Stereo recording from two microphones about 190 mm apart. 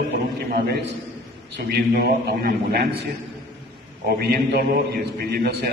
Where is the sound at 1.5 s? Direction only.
55° right (ahead or behind).